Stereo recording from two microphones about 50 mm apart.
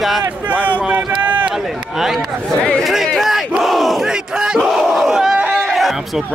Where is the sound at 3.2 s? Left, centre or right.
Centre.